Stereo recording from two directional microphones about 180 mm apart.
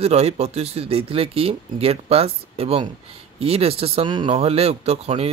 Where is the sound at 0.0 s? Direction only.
35° right (ahead or behind).